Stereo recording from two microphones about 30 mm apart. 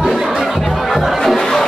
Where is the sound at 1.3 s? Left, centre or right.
Centre.